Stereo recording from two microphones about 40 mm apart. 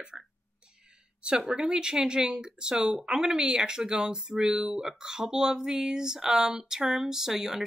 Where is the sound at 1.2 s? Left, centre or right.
Centre.